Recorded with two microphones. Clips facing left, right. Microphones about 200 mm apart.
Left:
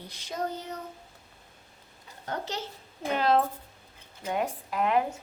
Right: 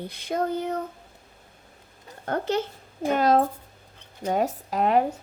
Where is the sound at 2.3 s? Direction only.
55° right (ahead or behind).